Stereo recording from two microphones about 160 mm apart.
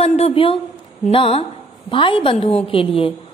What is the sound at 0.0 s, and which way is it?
A woman's voice, 40° left (ahead or behind).